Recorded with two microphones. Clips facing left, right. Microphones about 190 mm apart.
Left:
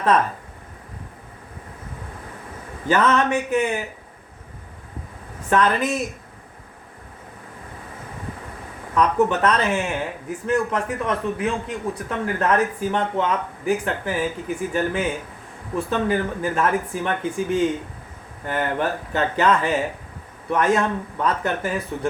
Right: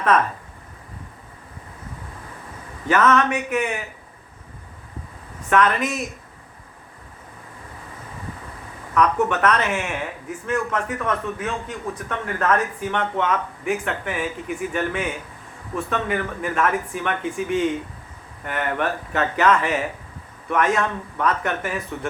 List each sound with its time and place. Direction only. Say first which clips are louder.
2.8 s speech: right 1 dB; 30° left (ahead or behind)
5.5 s speech: even; 30° left (ahead or behind)
9.0 s speech: left 1 dB; 30° left (ahead or behind)